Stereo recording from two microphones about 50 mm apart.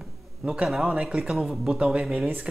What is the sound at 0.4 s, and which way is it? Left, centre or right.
A man's voice, centre.